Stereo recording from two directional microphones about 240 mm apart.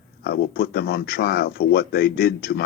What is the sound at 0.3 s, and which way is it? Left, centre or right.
Speech, left.